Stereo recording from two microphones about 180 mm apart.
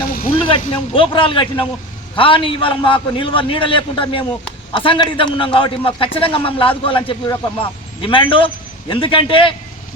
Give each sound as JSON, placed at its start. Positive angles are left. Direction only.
{"t": 0.4, "sound": "a man's voice", "side_deg": 30}